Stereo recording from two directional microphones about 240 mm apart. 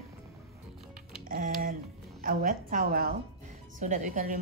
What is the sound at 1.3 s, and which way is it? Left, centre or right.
Speech, right.